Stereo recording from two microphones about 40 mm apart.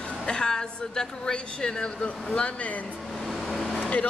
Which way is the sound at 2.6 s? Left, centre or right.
Left.